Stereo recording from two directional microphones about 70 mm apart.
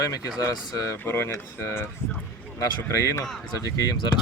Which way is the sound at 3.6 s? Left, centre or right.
Left.